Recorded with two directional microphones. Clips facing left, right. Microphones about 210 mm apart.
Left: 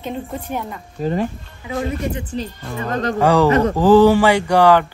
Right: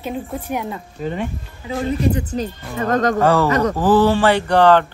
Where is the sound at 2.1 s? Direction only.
40° right (ahead or behind).